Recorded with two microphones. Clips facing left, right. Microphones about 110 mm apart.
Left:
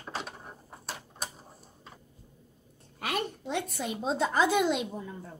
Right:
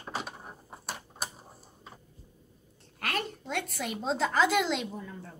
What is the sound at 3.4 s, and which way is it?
A woman's voice, 10° left (ahead or behind).